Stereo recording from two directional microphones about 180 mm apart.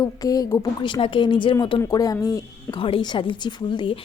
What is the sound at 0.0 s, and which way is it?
Speech, 20° left (ahead or behind).